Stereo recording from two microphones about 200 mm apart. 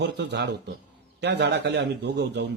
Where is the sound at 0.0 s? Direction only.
60° right (ahead or behind).